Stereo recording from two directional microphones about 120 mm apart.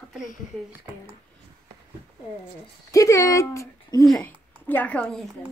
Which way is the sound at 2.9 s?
25° left (ahead or behind).